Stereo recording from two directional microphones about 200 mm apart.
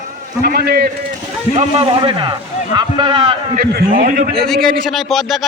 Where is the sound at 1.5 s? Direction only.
25° right (ahead or behind).